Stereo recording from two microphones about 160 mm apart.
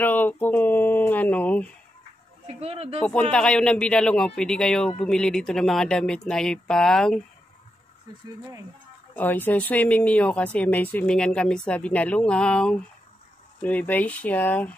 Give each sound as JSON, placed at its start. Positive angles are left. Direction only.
{"t": 0.0, "sound": "a sound", "side_deg": 10}
{"t": 2.4, "sound": "speech", "side_deg": -40}
{"t": 3.0, "sound": "speech", "side_deg": 5}
{"t": 9.1, "sound": "speech", "side_deg": 10}